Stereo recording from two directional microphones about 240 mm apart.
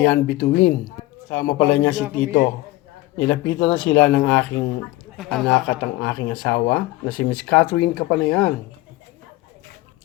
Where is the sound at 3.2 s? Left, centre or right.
Left.